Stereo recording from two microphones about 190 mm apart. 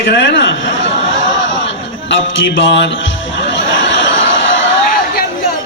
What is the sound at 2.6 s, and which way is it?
Speech, 70° left (ahead or behind).